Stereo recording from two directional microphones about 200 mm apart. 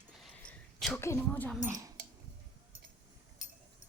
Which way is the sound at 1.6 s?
15° right (ahead or behind).